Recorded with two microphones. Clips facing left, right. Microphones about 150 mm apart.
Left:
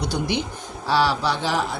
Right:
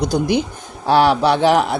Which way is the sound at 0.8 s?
55° right (ahead or behind).